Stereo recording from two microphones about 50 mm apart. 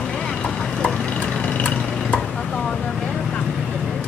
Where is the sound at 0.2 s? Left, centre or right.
Centre.